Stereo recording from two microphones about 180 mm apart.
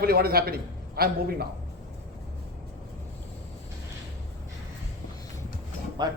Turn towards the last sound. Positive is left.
turn(degrees=-25)  # may be behind; listen again after turning